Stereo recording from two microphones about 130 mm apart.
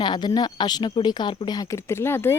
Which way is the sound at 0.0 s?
35° left (ahead or behind).